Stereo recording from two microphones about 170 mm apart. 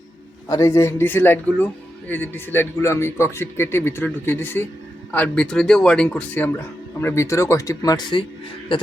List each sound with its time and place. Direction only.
0.4 s speech: 20° left (ahead or behind)